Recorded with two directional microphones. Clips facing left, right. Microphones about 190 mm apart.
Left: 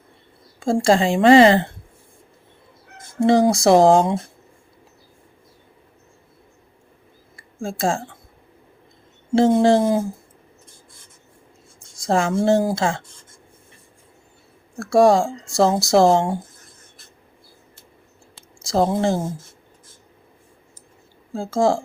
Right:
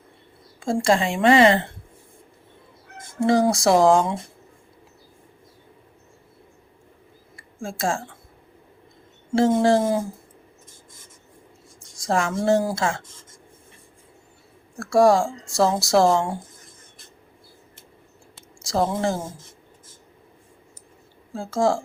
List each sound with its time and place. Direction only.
0.6 s a woman's voice: 30° left (ahead or behind)
3.2 s speech: 20° left (ahead or behind)
7.6 s speech: 25° left (ahead or behind)
9.3 s speech: 25° left (ahead or behind)
12.0 s speech: 25° left (ahead or behind)
14.8 s speech: 25° left (ahead or behind)
18.6 s speech: 25° left (ahead or behind)
21.3 s speech: 25° left (ahead or behind)